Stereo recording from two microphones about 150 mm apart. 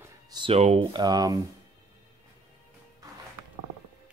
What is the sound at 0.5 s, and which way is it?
Speech, 45° right (ahead or behind).